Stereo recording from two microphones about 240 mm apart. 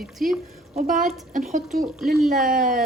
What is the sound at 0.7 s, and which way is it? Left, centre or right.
Speech, right.